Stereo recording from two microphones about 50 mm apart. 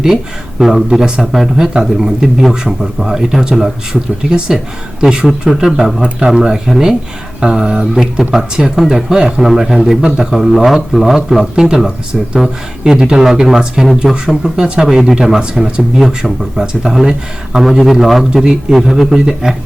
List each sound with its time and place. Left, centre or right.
0.6 s speech: centre
3.9 s speech: centre
4.3 s speech: centre